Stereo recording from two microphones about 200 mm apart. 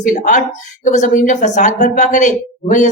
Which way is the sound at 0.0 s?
40° left (ahead or behind).